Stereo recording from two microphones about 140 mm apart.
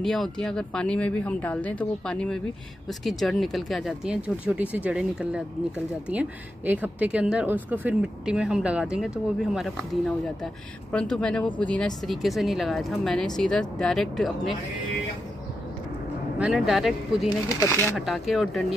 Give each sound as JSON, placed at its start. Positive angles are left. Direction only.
{"t": 0.0, "sound": "speech", "side_deg": 0}
{"t": 16.3, "sound": "speech", "side_deg": -5}
{"t": 17.6, "sound": "speech", "side_deg": 20}
{"t": 17.9, "sound": "speech", "side_deg": 0}